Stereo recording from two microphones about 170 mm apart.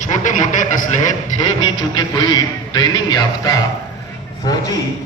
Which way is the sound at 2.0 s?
25° left (ahead or behind).